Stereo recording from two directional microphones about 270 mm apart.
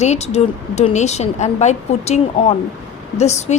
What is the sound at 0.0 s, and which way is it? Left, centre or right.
Speech, left.